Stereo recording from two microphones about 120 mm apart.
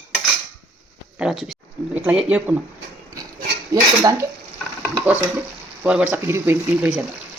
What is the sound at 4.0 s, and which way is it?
Speech, 25° right (ahead or behind).